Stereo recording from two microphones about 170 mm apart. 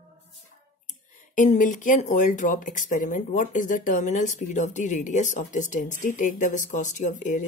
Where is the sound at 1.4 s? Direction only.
45° left (ahead or behind).